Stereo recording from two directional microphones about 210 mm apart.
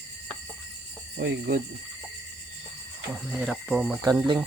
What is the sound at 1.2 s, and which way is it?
Speech, 50° right (ahead or behind).